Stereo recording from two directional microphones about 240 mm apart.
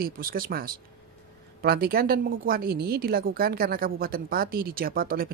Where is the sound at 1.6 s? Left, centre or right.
Right.